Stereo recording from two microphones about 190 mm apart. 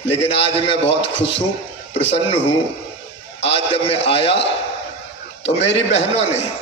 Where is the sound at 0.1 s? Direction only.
30° left (ahead or behind).